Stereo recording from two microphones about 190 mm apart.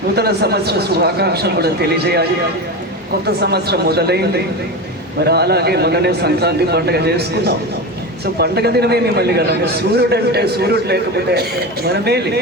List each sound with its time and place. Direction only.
0.2 s a man's voice: 60° right (ahead or behind)
3.2 s a man's voice: 60° right (ahead or behind)